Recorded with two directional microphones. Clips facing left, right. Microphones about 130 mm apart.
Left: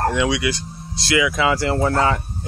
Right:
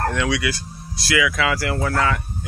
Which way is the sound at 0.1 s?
15° left (ahead or behind).